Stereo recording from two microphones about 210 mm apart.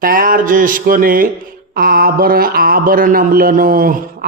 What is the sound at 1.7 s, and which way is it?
Mantra, 45° right (ahead or behind).